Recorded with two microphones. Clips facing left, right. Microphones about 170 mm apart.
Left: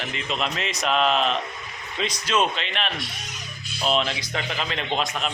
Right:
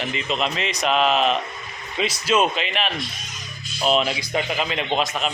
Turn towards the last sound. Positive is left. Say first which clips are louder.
# right 3 dB
turn(degrees=0)  # may be behind; listen again after turning